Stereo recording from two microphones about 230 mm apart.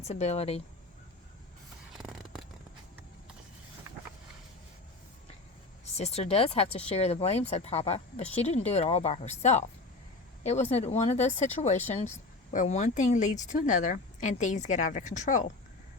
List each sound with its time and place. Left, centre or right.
0.0 s speech: left
5.8 s speech: left